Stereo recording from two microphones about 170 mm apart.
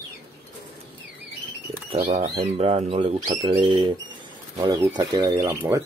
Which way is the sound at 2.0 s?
35° right (ahead or behind).